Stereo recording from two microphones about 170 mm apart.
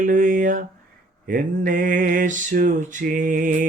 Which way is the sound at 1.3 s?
55° right (ahead or behind).